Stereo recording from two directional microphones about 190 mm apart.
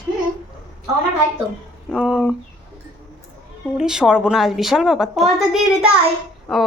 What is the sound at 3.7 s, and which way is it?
A woman's voice, 5° right (ahead or behind).